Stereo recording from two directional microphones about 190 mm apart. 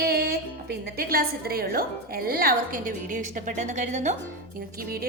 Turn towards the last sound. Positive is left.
turn(degrees=-50)  # may be behind; listen again after turning